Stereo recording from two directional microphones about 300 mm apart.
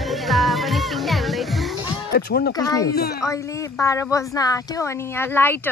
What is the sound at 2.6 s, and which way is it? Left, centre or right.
Speech, centre.